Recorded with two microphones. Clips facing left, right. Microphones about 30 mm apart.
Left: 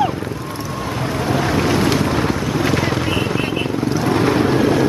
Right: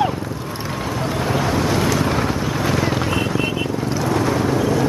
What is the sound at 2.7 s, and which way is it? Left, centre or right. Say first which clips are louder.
Vehicle: right 1 dB; centre.